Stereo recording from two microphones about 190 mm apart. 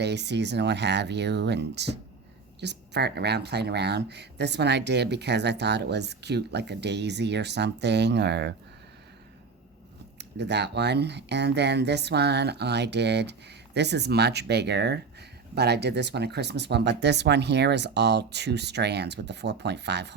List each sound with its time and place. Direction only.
0.0 s speech: 60° right (ahead or behind)
10.2 s speech: 65° right (ahead or behind)